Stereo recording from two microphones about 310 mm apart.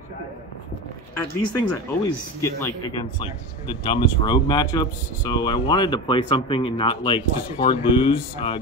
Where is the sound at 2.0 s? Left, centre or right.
Centre.